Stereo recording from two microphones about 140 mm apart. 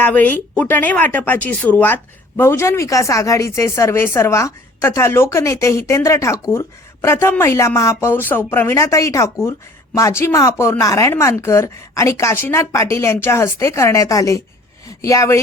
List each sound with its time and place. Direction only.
0.0 s speech: 10° left (ahead or behind)